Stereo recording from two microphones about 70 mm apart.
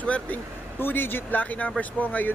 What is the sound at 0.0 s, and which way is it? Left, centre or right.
Speech, centre.